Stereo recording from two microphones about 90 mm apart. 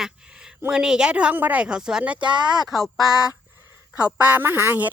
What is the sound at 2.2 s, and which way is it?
Speech, 60° right (ahead or behind).